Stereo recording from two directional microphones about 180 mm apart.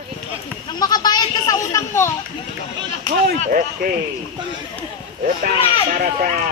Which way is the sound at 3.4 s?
50° right (ahead or behind).